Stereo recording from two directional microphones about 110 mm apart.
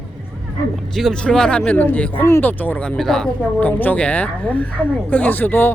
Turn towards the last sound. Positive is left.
turn(degrees=20)  # may be behind; listen again after turning